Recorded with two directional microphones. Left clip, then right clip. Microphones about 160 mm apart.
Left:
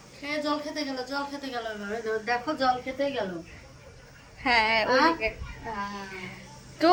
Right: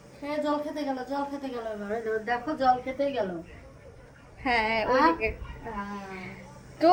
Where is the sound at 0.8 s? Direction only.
80° right.